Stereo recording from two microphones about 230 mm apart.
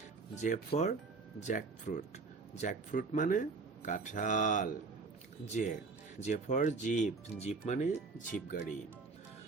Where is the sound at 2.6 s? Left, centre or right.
Left.